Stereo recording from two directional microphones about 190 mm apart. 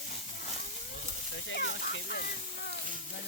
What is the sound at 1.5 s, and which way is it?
Speech, 65° left (ahead or behind).